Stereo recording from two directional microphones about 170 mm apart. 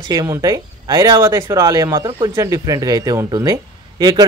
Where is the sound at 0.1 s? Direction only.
20° right (ahead or behind).